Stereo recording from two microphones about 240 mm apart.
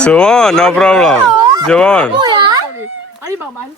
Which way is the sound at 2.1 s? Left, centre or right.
Centre.